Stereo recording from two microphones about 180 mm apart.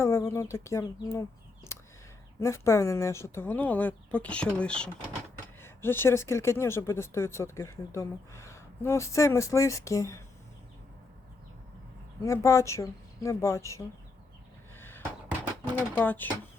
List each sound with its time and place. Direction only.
0.0 s speech: 15° left (ahead or behind)
1.7 s a sound: 15° left (ahead or behind)
2.4 s speech: 15° left (ahead or behind)
12.2 s speech: 15° left (ahead or behind)
14.8 s a sound: 10° left (ahead or behind)
15.6 s speech: 10° left (ahead or behind)